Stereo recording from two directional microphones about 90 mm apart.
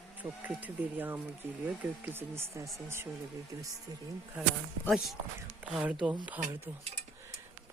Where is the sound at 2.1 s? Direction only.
30° right (ahead or behind).